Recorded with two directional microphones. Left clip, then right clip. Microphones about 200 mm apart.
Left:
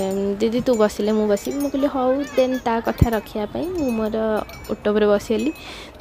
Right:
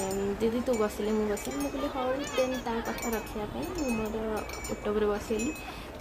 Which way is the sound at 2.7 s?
35° left (ahead or behind).